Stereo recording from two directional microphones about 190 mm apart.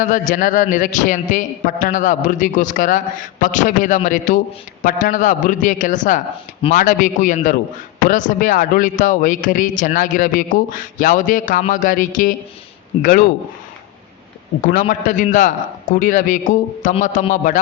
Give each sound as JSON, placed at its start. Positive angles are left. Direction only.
{"t": 0.0, "sound": "a man's voice", "side_deg": 45}
{"t": 14.6, "sound": "a man's voice", "side_deg": 45}